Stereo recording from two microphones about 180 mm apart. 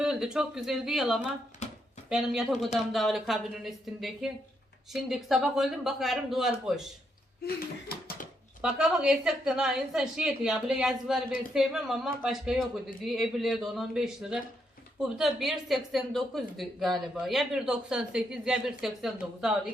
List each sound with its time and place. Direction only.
0.0 s speech: 5° right (ahead or behind)
1.6 s a sound: 40° left (ahead or behind)
2.0 s speech: centre (ahead or behind)
7.4 s speech: 55° left (ahead or behind)
8.6 s speech: 5° right (ahead or behind)